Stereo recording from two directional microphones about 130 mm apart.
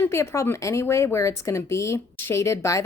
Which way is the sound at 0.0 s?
20° left (ahead or behind).